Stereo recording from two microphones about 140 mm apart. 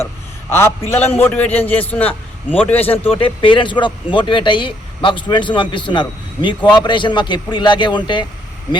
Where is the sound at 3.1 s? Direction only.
40° left (ahead or behind).